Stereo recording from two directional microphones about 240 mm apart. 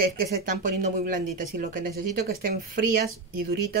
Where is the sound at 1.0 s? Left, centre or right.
Right.